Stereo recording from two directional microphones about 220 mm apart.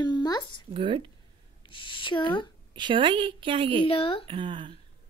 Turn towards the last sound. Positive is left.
turn(degrees=-20)  # may be behind; listen again after turning